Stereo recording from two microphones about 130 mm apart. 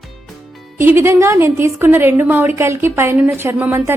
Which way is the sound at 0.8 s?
15° right (ahead or behind).